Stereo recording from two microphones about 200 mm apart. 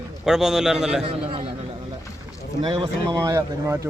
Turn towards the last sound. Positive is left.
turn(degrees=-15)  # may be behind; listen again after turning